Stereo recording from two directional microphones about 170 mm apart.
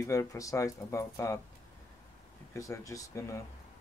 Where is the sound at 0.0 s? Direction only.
15° left (ahead or behind).